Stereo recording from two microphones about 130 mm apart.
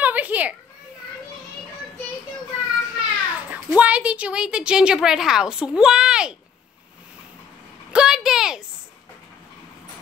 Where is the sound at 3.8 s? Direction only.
10° right (ahead or behind).